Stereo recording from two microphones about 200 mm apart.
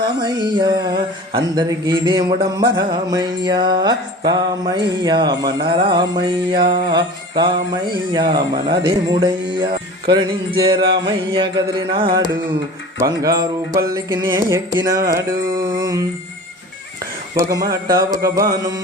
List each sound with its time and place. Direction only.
0.0 s a sound: 20° right (ahead or behind)
13.0 s music: 20° right (ahead or behind)
17.3 s music: 20° right (ahead or behind)